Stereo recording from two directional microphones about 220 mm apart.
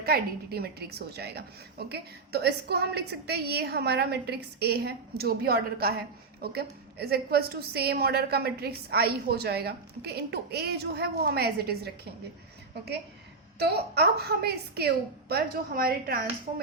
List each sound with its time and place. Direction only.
0.0 s a woman's voice: 45° right (ahead or behind)
13.6 s a woman's voice: 45° right (ahead or behind)